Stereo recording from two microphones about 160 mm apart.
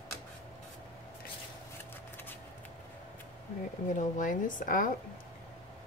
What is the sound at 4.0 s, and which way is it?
Speech, 55° left (ahead or behind).